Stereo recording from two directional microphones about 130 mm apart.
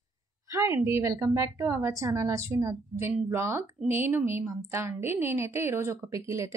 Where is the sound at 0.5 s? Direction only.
25° right (ahead or behind).